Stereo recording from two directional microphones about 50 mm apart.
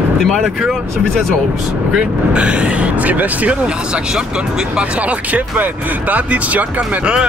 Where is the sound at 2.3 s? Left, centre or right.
Right.